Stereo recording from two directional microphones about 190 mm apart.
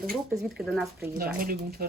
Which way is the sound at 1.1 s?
50° right (ahead or behind).